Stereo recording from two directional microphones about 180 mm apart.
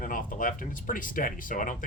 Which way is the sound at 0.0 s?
50° left (ahead or behind).